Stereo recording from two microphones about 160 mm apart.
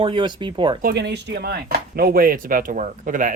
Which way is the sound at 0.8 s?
80° right.